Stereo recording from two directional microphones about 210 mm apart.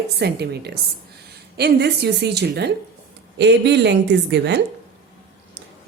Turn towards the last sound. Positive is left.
turn(degrees=-55)  # may be behind; listen again after turning